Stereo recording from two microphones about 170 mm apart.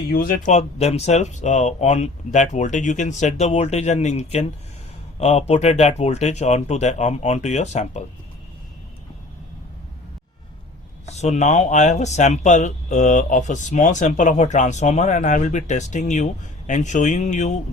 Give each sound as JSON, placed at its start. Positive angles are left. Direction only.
{"t": 0.1, "sound": "speech", "side_deg": 55}
{"t": 11.0, "sound": "speech", "side_deg": 40}